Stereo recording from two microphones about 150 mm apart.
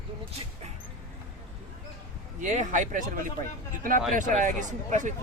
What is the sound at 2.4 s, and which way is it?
Speech, 55° right (ahead or behind).